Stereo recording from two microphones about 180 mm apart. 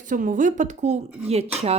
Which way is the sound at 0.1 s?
50° right (ahead or behind).